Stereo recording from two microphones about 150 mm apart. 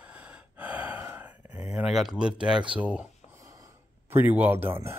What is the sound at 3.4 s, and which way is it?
Gasp, 20° right (ahead or behind).